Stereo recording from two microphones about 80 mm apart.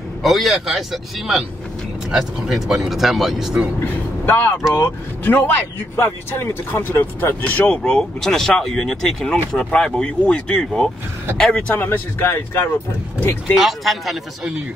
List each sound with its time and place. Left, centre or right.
0.2 s speech: centre
3.8 s speech: left
13.6 s speech: centre